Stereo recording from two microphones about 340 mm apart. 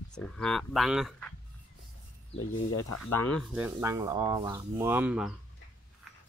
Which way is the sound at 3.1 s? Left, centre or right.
Centre.